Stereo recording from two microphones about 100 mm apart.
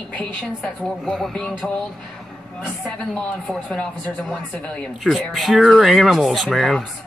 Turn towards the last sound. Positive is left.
turn(degrees=0)  # may be behind; listen again after turning